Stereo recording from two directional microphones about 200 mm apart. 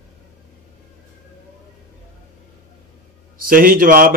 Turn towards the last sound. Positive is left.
turn(degrees=-45)  # may be behind; listen again after turning